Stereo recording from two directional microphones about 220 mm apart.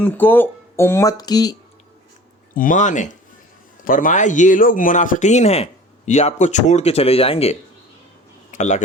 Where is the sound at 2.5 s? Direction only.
35° left (ahead or behind).